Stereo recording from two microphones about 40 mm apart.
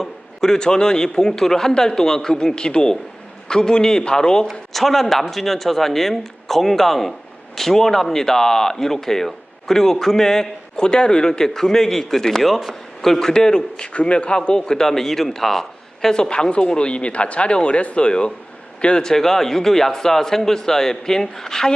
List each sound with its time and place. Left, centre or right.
0.0 s a man's voice: centre
4.4 s speech: centre
13.1 s a man's voice: centre